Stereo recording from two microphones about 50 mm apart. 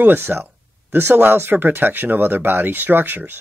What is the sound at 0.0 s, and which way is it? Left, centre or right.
Speech, right.